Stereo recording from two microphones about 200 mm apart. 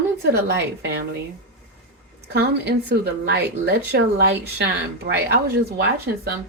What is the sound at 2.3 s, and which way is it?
Speech, 55° right (ahead or behind).